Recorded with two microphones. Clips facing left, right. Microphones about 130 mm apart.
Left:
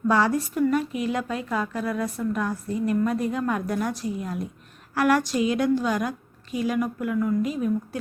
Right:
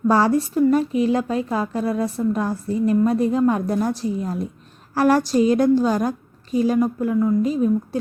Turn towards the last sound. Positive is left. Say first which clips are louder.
# right 6 dB
turn(degrees=-30)  # may be behind; listen again after turning